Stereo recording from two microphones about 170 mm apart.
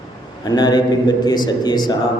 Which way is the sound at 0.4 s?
25° left (ahead or behind).